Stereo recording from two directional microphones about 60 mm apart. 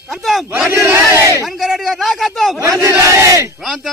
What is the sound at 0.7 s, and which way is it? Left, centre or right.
Battle cry, right.